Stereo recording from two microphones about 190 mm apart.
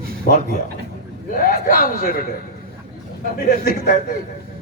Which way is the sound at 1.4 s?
50° left (ahead or behind).